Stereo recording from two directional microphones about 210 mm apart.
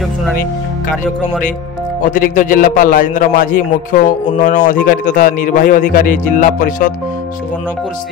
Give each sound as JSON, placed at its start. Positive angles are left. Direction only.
{"t": 2.0, "sound": "speech", "side_deg": 40}